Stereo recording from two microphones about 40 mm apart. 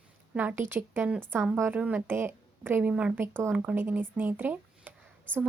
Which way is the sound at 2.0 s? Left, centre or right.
Right.